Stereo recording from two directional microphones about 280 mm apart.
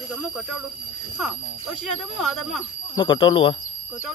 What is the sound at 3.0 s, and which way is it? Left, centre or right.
Speech, centre.